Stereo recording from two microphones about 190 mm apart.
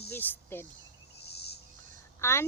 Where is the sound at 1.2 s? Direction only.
60° left (ahead or behind).